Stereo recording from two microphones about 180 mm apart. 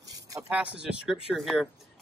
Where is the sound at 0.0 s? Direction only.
20° right (ahead or behind).